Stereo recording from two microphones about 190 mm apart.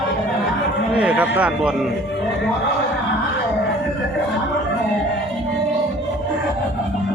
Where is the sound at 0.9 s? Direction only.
5° right (ahead or behind).